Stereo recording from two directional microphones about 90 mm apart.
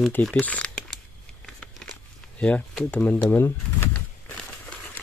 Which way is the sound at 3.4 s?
30° left (ahead or behind).